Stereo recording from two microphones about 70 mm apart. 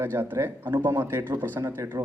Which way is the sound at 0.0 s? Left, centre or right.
Right.